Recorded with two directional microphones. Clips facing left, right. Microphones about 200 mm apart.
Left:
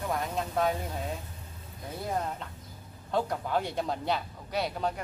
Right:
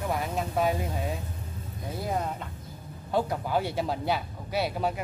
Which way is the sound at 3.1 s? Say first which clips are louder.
Right 2 dB; 5° right (ahead or behind).